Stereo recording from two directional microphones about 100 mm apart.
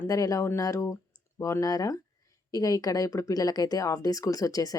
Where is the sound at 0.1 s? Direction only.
35° left (ahead or behind).